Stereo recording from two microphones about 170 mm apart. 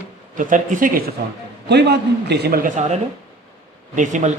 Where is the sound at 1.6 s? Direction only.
80° right.